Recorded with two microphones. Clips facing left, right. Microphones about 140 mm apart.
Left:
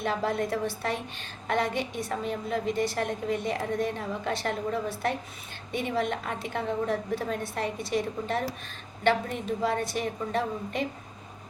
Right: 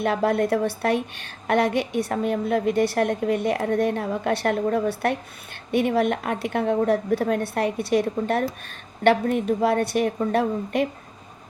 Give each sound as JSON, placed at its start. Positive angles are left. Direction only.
{"t": 0.0, "sound": "a woman's voice", "side_deg": -65}